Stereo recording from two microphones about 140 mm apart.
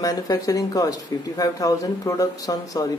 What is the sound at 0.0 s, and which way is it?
Speech, 25° left (ahead or behind).